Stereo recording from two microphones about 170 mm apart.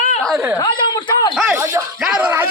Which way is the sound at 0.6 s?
25° left (ahead or behind).